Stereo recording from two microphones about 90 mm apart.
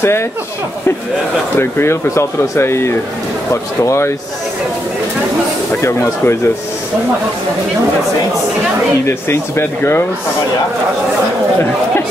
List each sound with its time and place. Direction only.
1.6 s speech: 30° left (ahead or behind)
5.8 s speech: 30° left (ahead or behind)
9.0 s speech: 30° left (ahead or behind)